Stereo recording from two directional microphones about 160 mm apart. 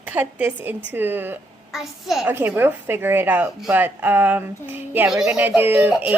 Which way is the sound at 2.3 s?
15° right (ahead or behind).